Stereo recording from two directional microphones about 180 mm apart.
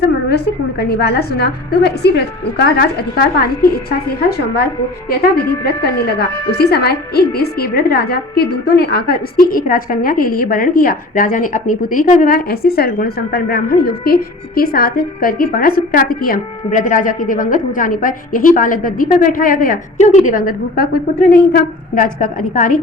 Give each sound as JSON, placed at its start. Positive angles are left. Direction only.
{"t": 0.8, "sound": "a woman's voice", "side_deg": 60}
{"t": 5.8, "sound": "a woman's voice", "side_deg": 60}